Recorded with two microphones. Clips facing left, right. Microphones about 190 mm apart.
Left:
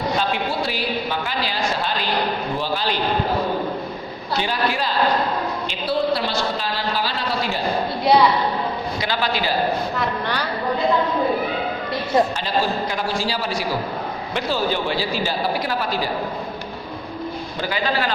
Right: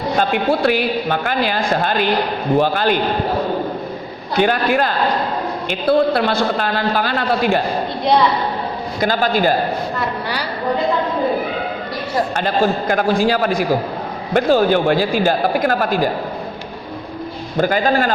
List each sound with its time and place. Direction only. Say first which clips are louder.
0.2 s a man's voice: right 7 dB; 55° right (ahead or behind)
4.4 s a man's voice: right 8 dB; 55° right (ahead or behind)
9.0 s speech: right 9 dB; 45° right (ahead or behind)
10.0 s a woman's voice: right 1 dB; 10° right (ahead or behind)
12.4 s speech: right 5 dB; 55° right (ahead or behind)
17.6 s speech: right 8 dB; 50° right (ahead or behind)